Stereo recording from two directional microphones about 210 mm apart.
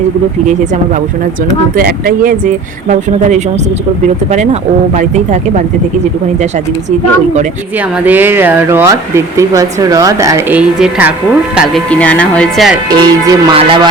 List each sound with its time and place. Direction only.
1.7 s speech: 45° right (ahead or behind)
8.0 s speech: 10° right (ahead or behind)
12.9 s speech: 20° right (ahead or behind)